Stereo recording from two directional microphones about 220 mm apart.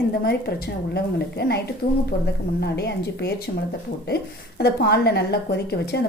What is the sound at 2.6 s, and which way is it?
Speech, 50° left (ahead or behind).